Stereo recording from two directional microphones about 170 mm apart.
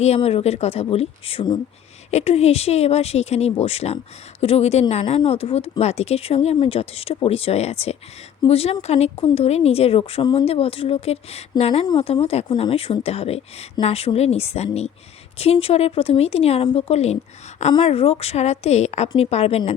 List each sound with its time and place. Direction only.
0.0 s speech: 40° left (ahead or behind)
11.9 s speech: 25° left (ahead or behind)